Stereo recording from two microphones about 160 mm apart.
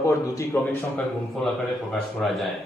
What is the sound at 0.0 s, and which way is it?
A man's voice, 20° left (ahead or behind).